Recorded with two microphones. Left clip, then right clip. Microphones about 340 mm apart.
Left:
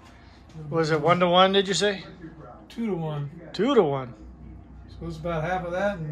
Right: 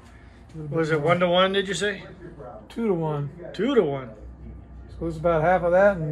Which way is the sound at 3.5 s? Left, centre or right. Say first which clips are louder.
Left 1 dB; centre.